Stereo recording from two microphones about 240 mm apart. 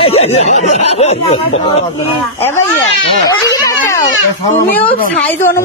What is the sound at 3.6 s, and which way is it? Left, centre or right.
Baby cry, centre.